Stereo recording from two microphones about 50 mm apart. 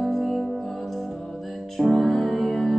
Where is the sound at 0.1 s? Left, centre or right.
Centre.